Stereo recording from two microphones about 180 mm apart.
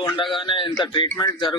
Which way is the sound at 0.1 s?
25° left (ahead or behind).